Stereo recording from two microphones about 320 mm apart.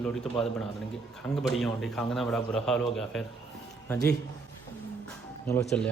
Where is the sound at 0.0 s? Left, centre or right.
Centre.